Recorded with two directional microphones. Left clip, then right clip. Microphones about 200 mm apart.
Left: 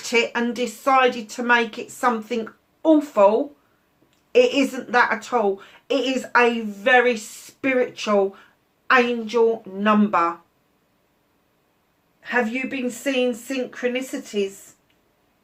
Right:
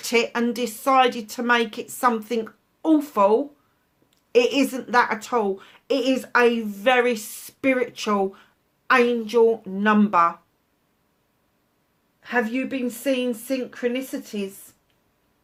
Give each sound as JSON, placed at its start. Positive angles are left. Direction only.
{"t": 0.0, "sound": "a woman's voice", "side_deg": -50}
{"t": 4.3, "sound": "a woman's voice", "side_deg": -50}
{"t": 12.2, "sound": "a woman's voice", "side_deg": -45}